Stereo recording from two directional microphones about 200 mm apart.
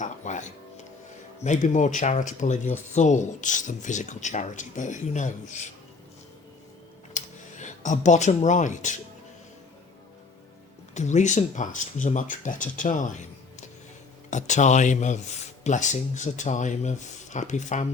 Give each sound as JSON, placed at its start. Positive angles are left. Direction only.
{"t": 0.0, "sound": "music", "side_deg": 35}
{"t": 1.5, "sound": "speech", "side_deg": 35}
{"t": 7.2, "sound": "a sound", "side_deg": 35}
{"t": 7.6, "sound": "speech", "side_deg": 35}
{"t": 10.9, "sound": "speech", "side_deg": 35}